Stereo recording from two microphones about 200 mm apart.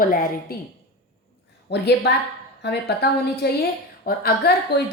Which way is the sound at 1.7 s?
60° left (ahead or behind).